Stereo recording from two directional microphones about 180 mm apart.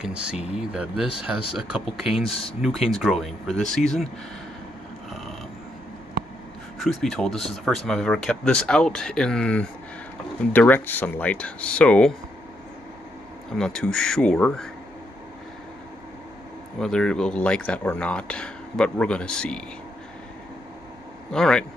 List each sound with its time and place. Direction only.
0.0 s speech: 5° right (ahead or behind)
2.2 s speech: 30° left (ahead or behind)
2.6 s speech: centre (ahead or behind)
6.8 s speech: centre (ahead or behind)
13.6 s speech: 5° left (ahead or behind)
16.8 s speech: 5° left (ahead or behind)
21.3 s speech: 5° left (ahead or behind)